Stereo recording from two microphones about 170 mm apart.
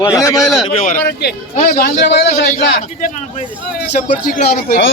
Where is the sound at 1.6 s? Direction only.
55° left (ahead or behind).